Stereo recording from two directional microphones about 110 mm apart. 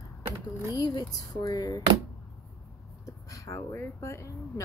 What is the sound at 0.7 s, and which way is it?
A woman's voice, 35° left (ahead or behind).